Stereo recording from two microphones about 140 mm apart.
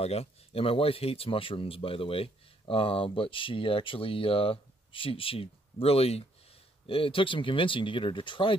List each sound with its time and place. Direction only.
0.0 s speech: 45° left (ahead or behind)